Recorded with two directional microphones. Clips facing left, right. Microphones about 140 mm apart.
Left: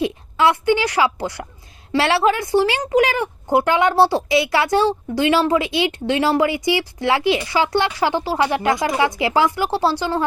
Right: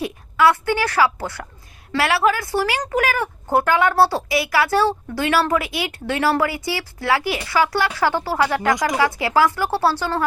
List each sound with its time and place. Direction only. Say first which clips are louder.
0.0 s a woman's voice: even; 20° left (ahead or behind)